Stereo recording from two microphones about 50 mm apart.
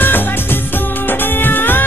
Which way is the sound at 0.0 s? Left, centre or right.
Left.